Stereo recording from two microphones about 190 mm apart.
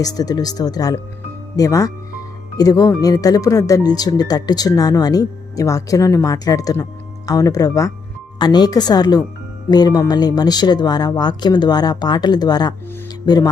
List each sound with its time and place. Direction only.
0.0 s speech: 20° left (ahead or behind)